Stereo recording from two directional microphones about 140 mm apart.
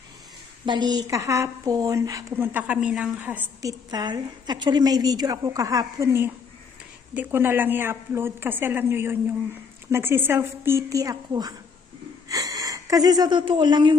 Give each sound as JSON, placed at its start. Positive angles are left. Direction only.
{"t": 0.7, "sound": "a woman's voice", "side_deg": -30}
{"t": 3.6, "sound": "a woman's voice", "side_deg": -30}